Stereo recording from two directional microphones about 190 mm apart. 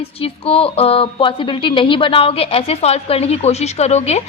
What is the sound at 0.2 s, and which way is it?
A woman's voice, 30° left (ahead or behind).